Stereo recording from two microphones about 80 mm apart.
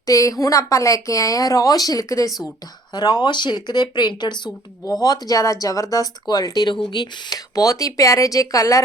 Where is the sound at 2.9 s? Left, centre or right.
Left.